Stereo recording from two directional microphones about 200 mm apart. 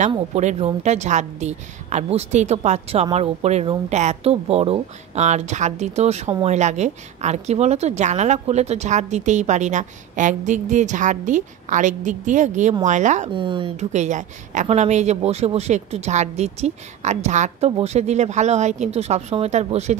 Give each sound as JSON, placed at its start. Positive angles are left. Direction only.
{"t": 0.1, "sound": "a woman's voice", "side_deg": -35}
{"t": 13.3, "sound": "a woman's voice", "side_deg": -25}